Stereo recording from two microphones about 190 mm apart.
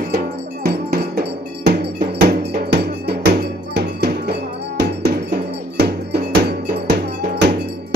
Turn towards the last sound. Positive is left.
turn(degrees=-60)  # may be behind; listen again after turning